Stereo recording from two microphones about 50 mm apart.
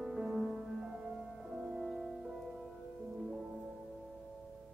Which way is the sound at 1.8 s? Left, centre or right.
Centre.